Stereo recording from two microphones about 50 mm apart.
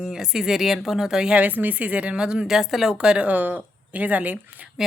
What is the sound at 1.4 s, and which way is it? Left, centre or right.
A woman's voice, right.